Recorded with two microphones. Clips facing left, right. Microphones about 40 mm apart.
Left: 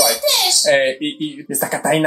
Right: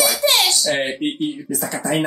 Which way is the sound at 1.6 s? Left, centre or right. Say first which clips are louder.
Left 5 dB; left.